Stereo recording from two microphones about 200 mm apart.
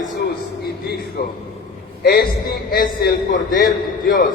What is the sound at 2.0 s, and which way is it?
Speech, 50° left (ahead or behind).